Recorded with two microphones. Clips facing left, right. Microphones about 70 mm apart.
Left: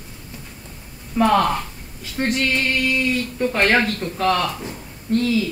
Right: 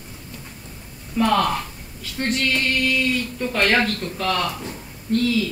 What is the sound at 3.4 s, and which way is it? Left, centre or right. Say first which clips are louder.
Speech: left 2 dB; left.